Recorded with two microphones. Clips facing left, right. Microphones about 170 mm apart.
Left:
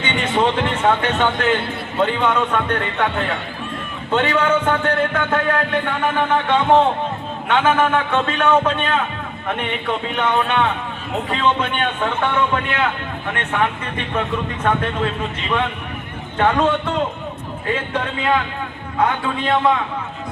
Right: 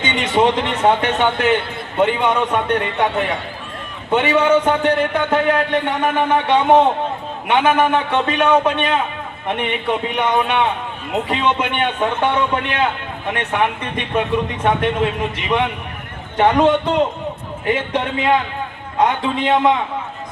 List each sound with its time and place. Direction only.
0.0 s a man's voice: 20° right (ahead or behind)